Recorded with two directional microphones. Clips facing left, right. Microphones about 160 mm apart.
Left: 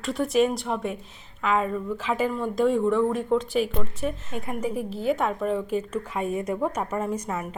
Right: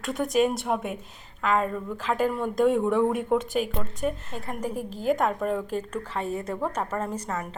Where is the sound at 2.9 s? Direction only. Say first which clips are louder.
Left 1 dB; 15° right (ahead or behind).